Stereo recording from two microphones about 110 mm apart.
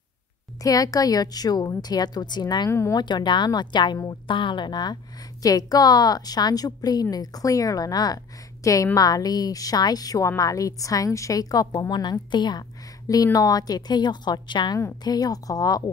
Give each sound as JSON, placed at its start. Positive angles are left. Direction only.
{"t": 0.6, "sound": "a woman's voice", "side_deg": 35}
{"t": 2.7, "sound": "speech", "side_deg": 25}
{"t": 3.0, "sound": "a woman's voice", "side_deg": 40}